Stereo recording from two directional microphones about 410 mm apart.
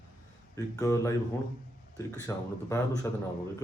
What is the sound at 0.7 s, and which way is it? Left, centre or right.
Speech, centre.